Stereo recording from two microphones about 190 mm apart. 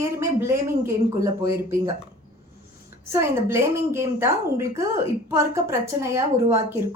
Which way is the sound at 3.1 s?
15° right (ahead or behind).